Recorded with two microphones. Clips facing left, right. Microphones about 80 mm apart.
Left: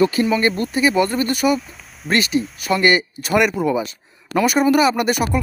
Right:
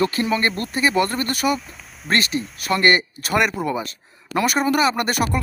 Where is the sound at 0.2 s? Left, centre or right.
Centre.